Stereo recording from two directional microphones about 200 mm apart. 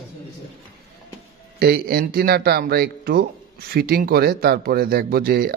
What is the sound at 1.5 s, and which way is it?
Speech, 50° right (ahead or behind).